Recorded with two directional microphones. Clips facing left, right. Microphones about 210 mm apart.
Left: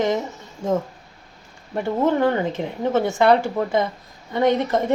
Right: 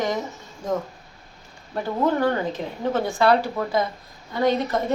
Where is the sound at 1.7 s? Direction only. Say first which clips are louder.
Left 3 dB; 25° left (ahead or behind).